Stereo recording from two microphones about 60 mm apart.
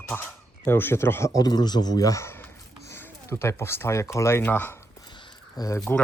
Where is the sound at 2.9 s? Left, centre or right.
Left.